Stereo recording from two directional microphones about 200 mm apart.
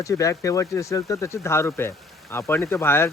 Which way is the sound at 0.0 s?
15° left (ahead or behind).